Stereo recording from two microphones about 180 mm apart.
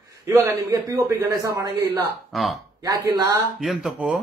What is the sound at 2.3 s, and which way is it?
Speech, centre (ahead or behind).